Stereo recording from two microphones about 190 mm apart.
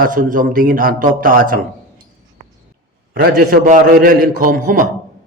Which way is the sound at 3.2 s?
50° right (ahead or behind).